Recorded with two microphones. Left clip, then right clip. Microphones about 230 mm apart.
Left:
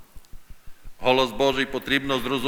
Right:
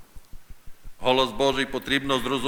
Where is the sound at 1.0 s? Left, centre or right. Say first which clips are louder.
Left 1 dB; centre.